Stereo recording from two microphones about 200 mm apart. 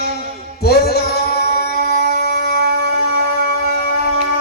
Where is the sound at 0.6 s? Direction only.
50° left (ahead or behind).